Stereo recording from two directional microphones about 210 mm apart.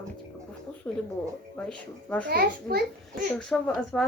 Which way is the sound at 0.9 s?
10° left (ahead or behind).